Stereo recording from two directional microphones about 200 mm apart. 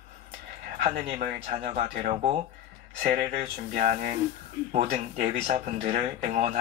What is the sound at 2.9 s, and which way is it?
Speech, 45° right (ahead or behind).